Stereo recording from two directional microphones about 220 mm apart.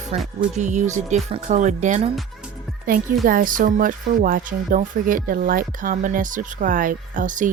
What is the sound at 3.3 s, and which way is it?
Speech, 40° right (ahead or behind).